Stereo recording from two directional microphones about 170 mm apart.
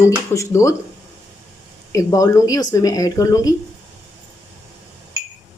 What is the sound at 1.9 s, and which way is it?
Speech, 20° left (ahead or behind).